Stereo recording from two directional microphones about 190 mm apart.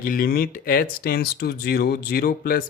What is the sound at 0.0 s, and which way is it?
Speech, 50° left (ahead or behind).